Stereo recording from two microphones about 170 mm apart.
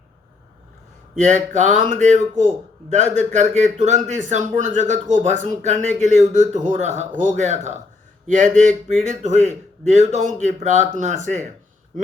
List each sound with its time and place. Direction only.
1.1 s speech: 45° right (ahead or behind)